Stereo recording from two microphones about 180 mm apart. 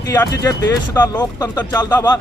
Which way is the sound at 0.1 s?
20° left (ahead or behind).